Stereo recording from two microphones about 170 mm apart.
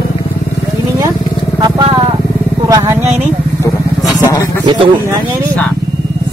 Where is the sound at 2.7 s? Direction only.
15° right (ahead or behind).